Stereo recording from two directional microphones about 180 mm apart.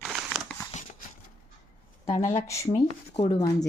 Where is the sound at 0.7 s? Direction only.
40° left (ahead or behind).